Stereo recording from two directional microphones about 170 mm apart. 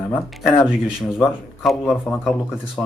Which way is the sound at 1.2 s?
Centre (ahead or behind).